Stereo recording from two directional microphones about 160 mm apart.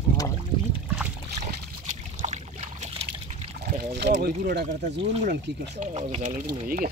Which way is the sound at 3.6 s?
80° right.